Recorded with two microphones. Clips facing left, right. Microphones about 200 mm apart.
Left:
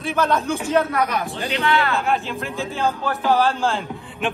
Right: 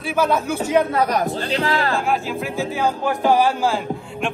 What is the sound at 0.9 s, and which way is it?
Speech, 35° right (ahead or behind).